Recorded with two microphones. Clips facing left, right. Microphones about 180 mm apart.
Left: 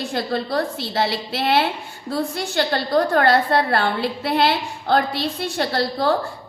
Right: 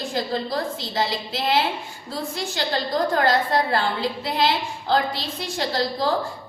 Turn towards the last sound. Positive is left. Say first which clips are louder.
# left 3 dB
turn(degrees=60)  # may be behind; listen again after turning